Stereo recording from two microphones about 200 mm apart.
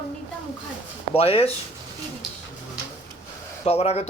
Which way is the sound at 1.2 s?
30° left (ahead or behind).